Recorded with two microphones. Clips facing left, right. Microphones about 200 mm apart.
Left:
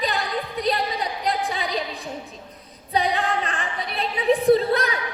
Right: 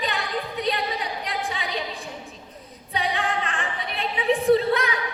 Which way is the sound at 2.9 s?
35° left (ahead or behind).